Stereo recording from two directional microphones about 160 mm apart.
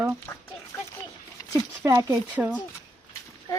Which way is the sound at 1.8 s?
15° right (ahead or behind).